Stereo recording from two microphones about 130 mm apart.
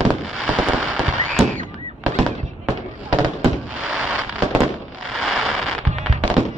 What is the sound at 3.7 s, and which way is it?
Fireworks, 5° right (ahead or behind).